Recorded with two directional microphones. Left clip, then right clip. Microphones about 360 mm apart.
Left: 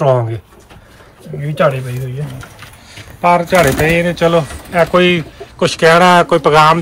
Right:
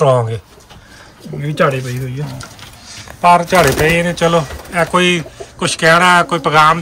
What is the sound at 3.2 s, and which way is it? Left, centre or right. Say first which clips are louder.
A man's voice: right 1 dB; centre.